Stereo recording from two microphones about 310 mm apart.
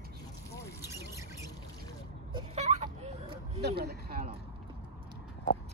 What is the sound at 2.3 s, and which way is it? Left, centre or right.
Vehicle, centre.